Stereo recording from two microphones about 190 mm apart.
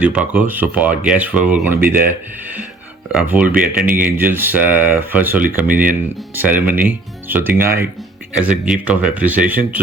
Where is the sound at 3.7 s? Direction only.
10° right (ahead or behind).